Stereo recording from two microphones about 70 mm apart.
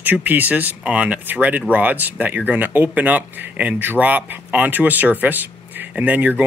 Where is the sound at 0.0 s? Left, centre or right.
Right.